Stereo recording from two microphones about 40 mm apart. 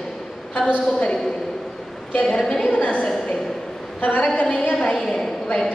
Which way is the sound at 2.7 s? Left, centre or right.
Left.